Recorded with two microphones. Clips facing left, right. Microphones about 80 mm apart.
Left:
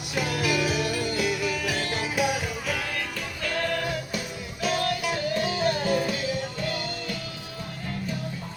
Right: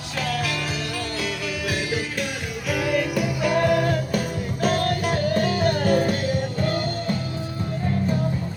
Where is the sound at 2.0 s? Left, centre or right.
Centre.